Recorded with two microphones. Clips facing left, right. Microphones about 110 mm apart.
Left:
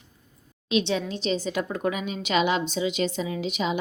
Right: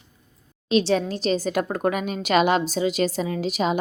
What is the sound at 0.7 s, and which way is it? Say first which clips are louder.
A woman's voice: right 5 dB; 40° right (ahead or behind).